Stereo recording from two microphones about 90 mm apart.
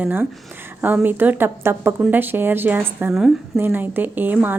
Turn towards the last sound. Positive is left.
turn(degrees=-20)  # may be behind; listen again after turning